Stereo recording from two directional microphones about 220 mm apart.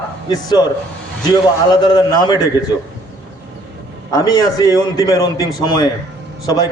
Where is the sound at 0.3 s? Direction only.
20° left (ahead or behind).